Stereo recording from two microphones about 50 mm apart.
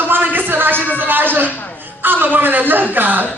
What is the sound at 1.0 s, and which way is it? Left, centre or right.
A man's voice, right.